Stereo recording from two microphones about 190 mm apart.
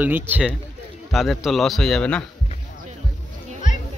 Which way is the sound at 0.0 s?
10° right (ahead or behind).